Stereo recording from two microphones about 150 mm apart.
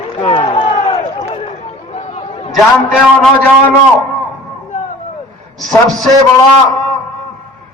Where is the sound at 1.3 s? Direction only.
45° left (ahead or behind).